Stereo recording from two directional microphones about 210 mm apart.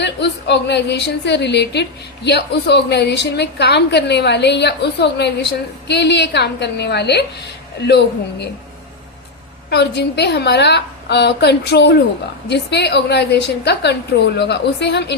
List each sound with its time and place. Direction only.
0.0 s a woman's voice: 55° left (ahead or behind)
9.6 s a woman's voice: 50° left (ahead or behind)
14.3 s a woman's voice: 55° left (ahead or behind)